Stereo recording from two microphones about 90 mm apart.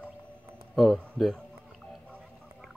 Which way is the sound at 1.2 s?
5° left (ahead or behind).